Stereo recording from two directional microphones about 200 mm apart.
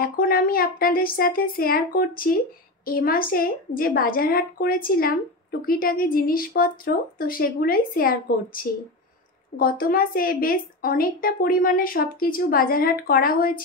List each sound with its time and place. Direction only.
0.0 s a woman's voice: 45° left (ahead or behind)